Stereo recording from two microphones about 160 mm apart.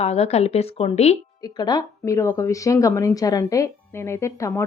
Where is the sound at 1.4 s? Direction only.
25° left (ahead or behind).